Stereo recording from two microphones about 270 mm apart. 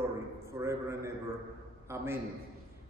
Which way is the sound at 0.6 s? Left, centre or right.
Centre.